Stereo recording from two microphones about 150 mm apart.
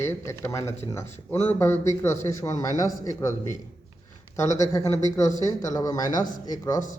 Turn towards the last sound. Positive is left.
turn(degrees=25)  # may be behind; listen again after turning